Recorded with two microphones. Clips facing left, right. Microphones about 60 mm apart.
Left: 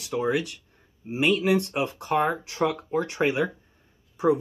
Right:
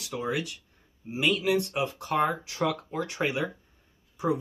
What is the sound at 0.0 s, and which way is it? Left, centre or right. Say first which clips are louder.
Speech: left 5 dB; left.